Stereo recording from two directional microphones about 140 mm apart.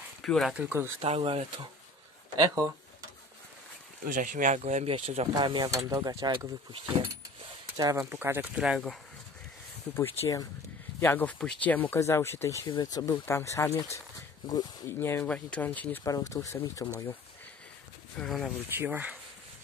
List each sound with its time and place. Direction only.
0.2 s speech: centre (ahead or behind)
0.6 s speech: 15° right (ahead or behind)
1.0 s speech: 45° right (ahead or behind)
2.3 s speech: 25° right (ahead or behind)
4.0 s speech: 70° right (ahead or behind); by 5.3 s 45° right (ahead or behind)
5.3 s speech: 30° right (ahead or behind)
8.0 s speech: 15° right (ahead or behind)
9.9 s speech: 20° left (ahead or behind)
12.6 s speech: 30° left (ahead or behind); by 16.0 s 10° left (ahead or behind)
16.0 s speech: 25° left (ahead or behind)
18.2 s speech: centre (ahead or behind)
18.8 s speech: 10° right (ahead or behind)